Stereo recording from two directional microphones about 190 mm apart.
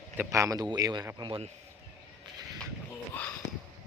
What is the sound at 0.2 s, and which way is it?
A man's voice, 15° right (ahead or behind).